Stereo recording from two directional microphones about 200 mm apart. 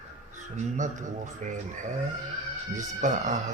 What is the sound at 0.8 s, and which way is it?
Speech, 40° right (ahead or behind).